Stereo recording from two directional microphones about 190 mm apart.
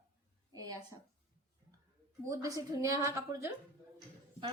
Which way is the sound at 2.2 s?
20° right (ahead or behind).